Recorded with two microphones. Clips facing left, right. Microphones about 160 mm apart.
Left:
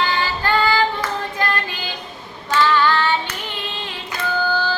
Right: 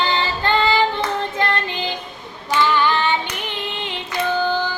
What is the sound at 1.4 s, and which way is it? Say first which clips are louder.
Child singing: right 1 dB; 25° right (ahead or behind).